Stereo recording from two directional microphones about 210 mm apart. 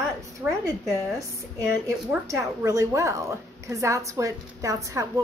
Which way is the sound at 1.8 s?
15° right (ahead or behind).